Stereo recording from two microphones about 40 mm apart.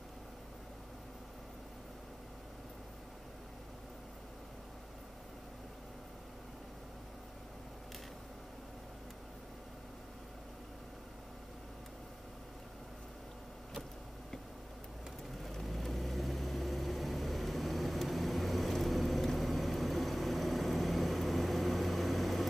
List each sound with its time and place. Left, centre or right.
15.6 s vehicle: centre